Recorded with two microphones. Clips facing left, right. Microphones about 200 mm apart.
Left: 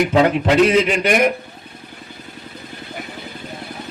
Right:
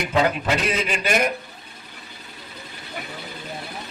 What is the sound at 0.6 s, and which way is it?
Speech, 75° left (ahead or behind).